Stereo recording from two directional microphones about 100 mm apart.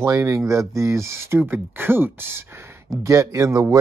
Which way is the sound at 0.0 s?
30° right (ahead or behind).